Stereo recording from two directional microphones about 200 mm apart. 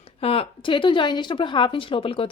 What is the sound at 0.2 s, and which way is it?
Speech, 30° left (ahead or behind).